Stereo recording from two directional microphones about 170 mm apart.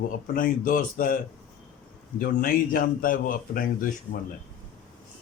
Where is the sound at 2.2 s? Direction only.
55° left (ahead or behind).